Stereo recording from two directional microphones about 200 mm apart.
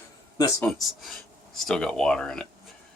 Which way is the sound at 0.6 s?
Centre (ahead or behind).